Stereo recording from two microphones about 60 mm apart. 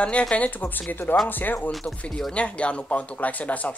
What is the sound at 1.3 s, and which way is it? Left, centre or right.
Speech, left.